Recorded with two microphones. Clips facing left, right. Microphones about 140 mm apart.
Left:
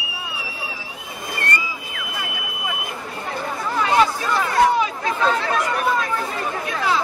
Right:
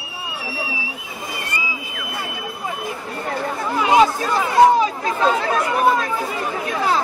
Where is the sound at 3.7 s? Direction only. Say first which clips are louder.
Right 3 dB; 15° right (ahead or behind).